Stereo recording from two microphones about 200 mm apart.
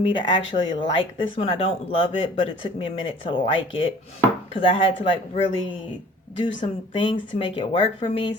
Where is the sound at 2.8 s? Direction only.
25° left (ahead or behind).